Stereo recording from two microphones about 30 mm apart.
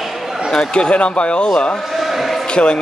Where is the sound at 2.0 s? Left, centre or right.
Centre.